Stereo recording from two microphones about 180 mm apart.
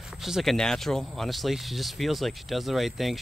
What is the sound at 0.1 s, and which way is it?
Speech, centre (ahead or behind).